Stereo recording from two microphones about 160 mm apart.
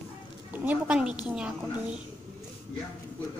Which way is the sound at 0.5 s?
10° right (ahead or behind).